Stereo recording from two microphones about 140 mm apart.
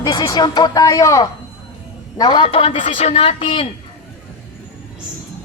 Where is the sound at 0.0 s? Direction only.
30° left (ahead or behind).